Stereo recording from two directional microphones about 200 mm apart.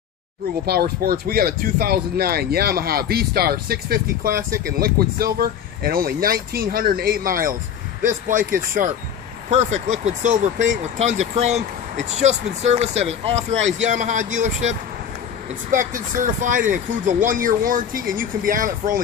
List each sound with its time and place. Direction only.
0.7 s speech: 50° right (ahead or behind); by 13.6 s 30° right (ahead or behind)
13.6 s speech: 70° right (ahead or behind)
13.8 s speech: 40° right (ahead or behind)